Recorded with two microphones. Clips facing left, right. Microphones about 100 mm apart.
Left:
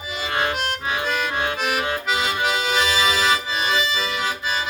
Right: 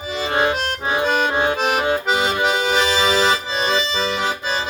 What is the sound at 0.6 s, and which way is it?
Accordion, 30° right (ahead or behind).